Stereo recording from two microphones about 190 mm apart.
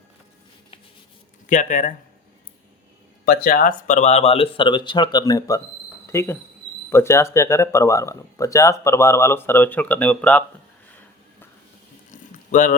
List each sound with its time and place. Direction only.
1.5 s speech: 40° left (ahead or behind)
3.2 s speech: 50° left (ahead or behind); by 10.4 s 5° left (ahead or behind)
12.1 s a sound: 40° left (ahead or behind)